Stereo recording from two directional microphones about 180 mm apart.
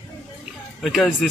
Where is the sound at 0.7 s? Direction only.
Centre (ahead or behind).